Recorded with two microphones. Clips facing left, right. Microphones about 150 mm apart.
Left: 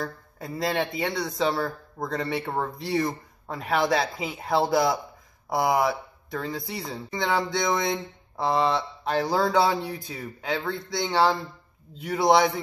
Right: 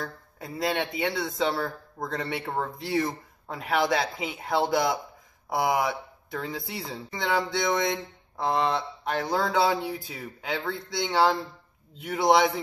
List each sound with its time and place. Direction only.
0.0 s speech: centre (ahead or behind)